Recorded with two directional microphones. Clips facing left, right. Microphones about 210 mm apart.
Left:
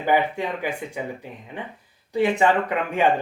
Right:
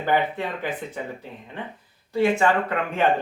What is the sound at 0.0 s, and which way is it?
Speech, 10° left (ahead or behind).